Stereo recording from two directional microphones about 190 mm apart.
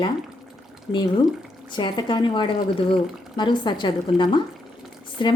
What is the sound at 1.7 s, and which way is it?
Speech, 25° left (ahead or behind).